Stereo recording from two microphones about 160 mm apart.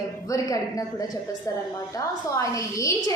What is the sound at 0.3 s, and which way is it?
Speech, 20° left (ahead or behind).